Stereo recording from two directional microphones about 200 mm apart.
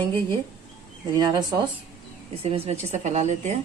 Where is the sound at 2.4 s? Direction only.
30° right (ahead or behind).